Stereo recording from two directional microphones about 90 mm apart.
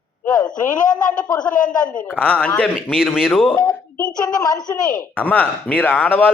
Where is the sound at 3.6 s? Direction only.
40° left (ahead or behind).